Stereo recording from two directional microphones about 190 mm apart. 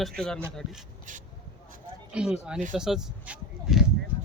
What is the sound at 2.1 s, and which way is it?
Speech, 5° right (ahead or behind).